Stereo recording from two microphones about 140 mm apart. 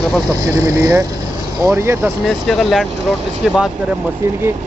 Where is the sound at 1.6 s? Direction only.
20° right (ahead or behind).